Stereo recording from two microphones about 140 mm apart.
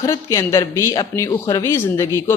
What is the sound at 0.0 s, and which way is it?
A woman's voice, 20° left (ahead or behind).